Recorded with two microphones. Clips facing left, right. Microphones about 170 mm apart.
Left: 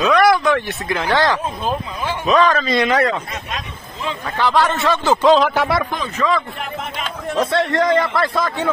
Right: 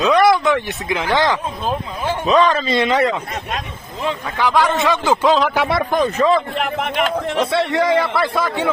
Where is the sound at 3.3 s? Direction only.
50° right (ahead or behind).